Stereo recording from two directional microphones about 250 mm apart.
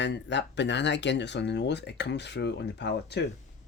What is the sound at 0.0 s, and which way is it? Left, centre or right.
Speech, left.